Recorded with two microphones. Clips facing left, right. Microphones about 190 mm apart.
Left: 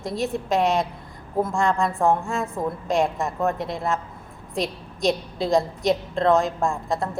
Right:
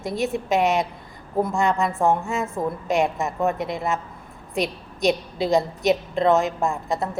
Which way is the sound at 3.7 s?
Centre (ahead or behind).